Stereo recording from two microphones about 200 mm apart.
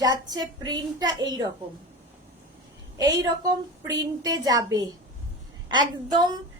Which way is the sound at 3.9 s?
20° right (ahead or behind).